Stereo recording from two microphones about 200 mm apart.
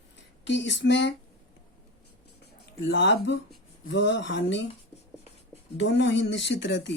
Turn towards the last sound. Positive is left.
turn(degrees=60)  # may be behind; listen again after turning